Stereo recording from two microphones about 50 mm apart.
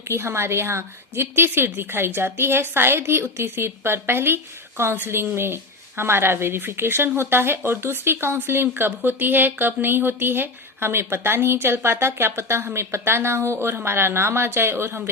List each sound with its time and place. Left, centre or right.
0.1 s a woman's voice: right